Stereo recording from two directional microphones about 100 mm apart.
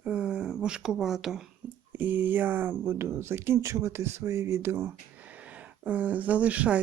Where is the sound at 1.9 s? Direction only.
20° right (ahead or behind).